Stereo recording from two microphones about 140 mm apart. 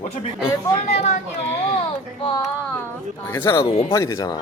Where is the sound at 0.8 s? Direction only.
55° left (ahead or behind).